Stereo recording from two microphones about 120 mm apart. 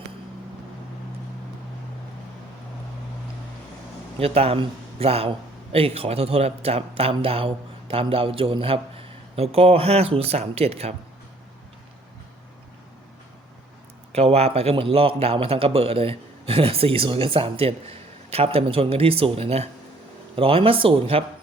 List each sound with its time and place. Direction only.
4.2 s speech: 55° right (ahead or behind)
14.1 s a man's voice: 60° right (ahead or behind)